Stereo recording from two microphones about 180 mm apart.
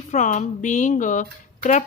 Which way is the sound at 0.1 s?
40° left (ahead or behind).